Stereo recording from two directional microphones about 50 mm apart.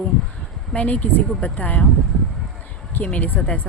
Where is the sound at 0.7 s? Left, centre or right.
Left.